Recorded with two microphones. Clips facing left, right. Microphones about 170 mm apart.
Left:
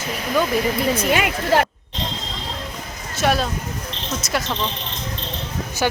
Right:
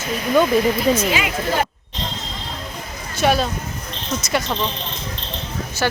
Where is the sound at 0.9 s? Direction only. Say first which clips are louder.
Left 1 dB; 55° left (ahead or behind).